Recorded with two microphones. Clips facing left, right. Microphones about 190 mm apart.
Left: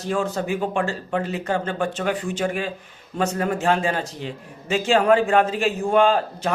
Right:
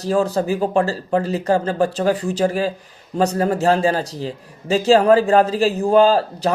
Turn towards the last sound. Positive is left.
turn(degrees=-35)  # may be behind; listen again after turning